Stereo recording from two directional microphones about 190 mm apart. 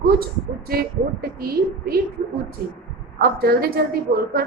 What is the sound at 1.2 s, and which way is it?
Speech, 55° right (ahead or behind).